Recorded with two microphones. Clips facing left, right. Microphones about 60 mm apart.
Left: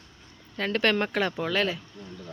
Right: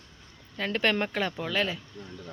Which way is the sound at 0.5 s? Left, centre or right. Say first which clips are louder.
Left 2 dB; centre.